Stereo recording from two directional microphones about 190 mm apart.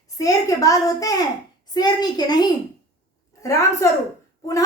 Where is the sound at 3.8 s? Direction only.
15° left (ahead or behind).